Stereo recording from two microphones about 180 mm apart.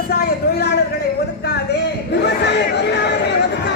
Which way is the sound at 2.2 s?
70° left (ahead or behind).